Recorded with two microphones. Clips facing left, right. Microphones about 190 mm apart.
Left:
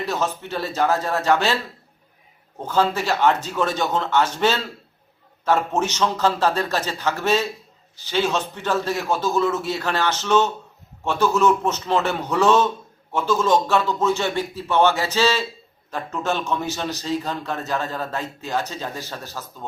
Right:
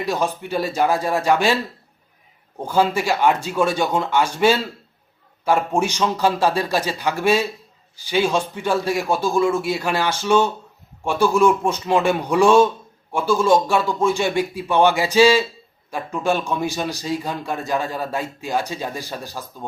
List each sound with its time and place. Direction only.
0.0 s a man's voice: 15° right (ahead or behind)
2.6 s a man's voice: 10° right (ahead or behind)